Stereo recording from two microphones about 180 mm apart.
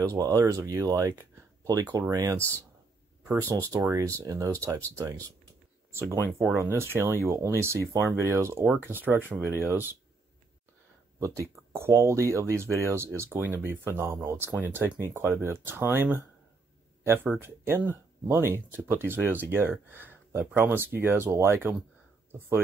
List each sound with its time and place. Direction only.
0.0 s speech: 20° right (ahead or behind)
11.1 s speech: 15° right (ahead or behind)